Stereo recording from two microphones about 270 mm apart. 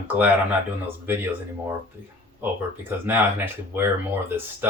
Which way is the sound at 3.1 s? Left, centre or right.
Centre.